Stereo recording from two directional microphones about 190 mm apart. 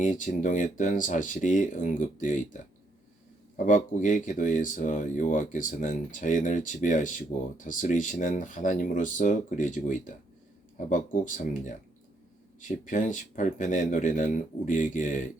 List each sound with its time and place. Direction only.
0.0 s speech: 40° left (ahead or behind)
3.7 s speech: 40° left (ahead or behind)